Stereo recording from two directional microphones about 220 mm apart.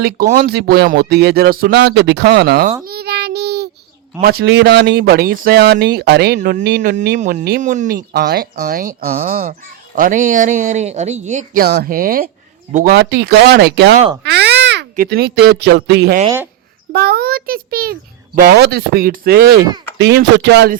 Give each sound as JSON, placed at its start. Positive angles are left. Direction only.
{"t": 0.0, "sound": "speech", "side_deg": -40}
{"t": 2.8, "sound": "child singing", "side_deg": -45}
{"t": 4.2, "sound": "speech", "side_deg": -45}